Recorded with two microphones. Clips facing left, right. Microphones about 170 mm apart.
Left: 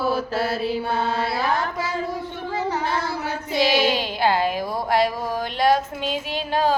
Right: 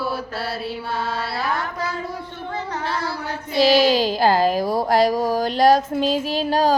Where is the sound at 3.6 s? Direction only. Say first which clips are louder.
Right 6 dB; 40° right (ahead or behind).